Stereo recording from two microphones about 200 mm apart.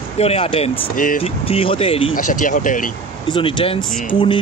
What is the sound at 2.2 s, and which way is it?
Speech, 40° left (ahead or behind).